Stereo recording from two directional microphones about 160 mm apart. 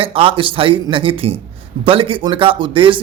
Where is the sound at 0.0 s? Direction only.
35° right (ahead or behind).